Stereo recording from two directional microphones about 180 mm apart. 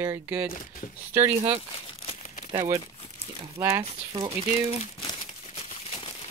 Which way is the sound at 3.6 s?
10° right (ahead or behind).